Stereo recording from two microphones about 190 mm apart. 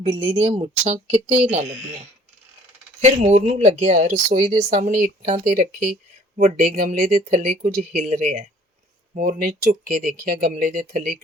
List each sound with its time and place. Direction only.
0.3 s speech: 30° right (ahead or behind)
3.0 s speech: 35° right (ahead or behind)